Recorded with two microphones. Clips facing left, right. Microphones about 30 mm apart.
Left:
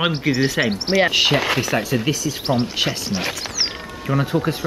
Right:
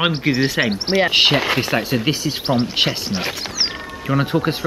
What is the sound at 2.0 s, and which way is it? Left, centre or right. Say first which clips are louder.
Speech: right 2 dB; right.